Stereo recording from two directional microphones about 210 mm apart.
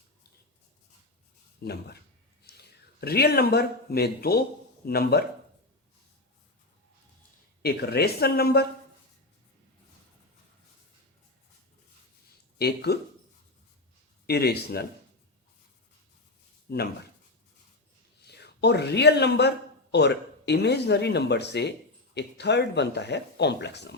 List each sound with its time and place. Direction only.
1.6 s speech: 50° left (ahead or behind)
7.6 s speech: 50° left (ahead or behind)
12.5 s speech: 50° left (ahead or behind)
14.3 s speech: 50° left (ahead or behind)
16.6 s speech: 50° left (ahead or behind)
18.3 s a man's voice: 50° left (ahead or behind)